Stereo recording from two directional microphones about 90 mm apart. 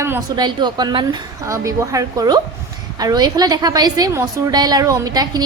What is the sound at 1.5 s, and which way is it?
A woman's voice, 35° right (ahead or behind).